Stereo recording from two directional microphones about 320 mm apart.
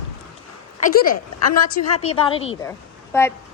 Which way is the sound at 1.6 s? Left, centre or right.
Left.